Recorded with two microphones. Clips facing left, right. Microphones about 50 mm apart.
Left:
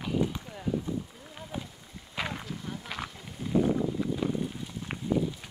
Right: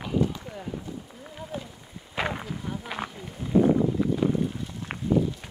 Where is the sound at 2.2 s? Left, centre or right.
Centre.